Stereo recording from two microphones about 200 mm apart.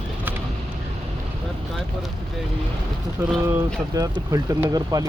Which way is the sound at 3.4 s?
15° right (ahead or behind).